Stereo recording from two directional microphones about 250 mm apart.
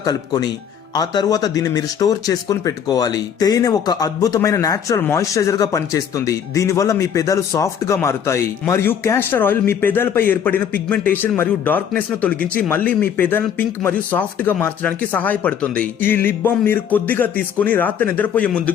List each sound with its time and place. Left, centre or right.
0.0 s speech: centre